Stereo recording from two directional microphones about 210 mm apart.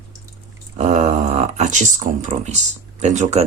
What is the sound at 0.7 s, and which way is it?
Speech, 30° right (ahead or behind).